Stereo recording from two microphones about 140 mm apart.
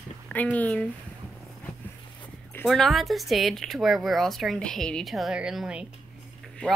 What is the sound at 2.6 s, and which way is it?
Speech, centre (ahead or behind).